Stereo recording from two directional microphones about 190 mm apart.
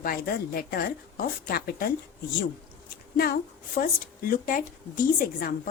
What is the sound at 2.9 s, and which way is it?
A woman's voice, 50° left (ahead or behind).